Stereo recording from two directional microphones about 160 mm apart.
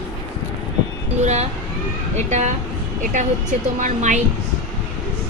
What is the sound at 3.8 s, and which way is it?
Speech, 50° right (ahead or behind).